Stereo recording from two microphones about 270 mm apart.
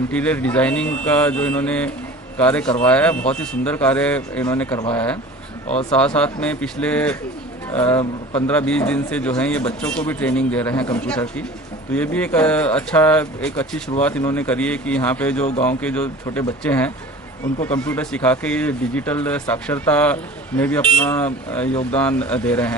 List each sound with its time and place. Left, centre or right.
0.1 s a man's voice: centre
8.0 s a man's voice: left
8.5 s a man's voice: centre